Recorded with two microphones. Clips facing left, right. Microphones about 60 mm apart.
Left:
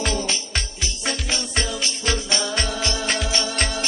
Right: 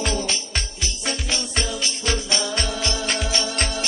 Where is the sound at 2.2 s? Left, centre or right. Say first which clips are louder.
Left 1 dB; left.